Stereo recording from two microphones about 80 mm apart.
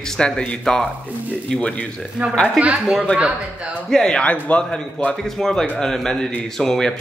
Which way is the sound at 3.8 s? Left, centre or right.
Centre.